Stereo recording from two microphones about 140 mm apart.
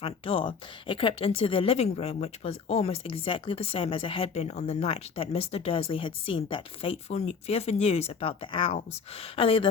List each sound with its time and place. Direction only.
0.0 s a woman's voice: 40° left (ahead or behind)